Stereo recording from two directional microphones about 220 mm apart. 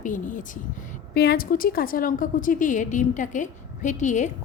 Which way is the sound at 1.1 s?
45° left (ahead or behind).